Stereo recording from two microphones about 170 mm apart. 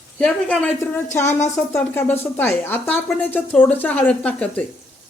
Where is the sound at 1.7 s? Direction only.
10° left (ahead or behind).